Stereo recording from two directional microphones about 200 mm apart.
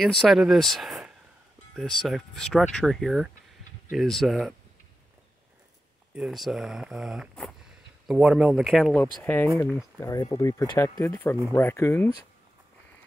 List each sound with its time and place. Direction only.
0.0 s speech: centre (ahead or behind)
6.1 s speech: centre (ahead or behind); by 12.3 s 15° left (ahead or behind)